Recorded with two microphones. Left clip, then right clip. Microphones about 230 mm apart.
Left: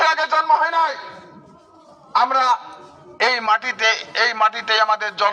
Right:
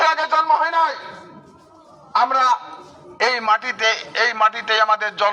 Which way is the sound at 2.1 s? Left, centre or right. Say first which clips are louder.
Even; centre.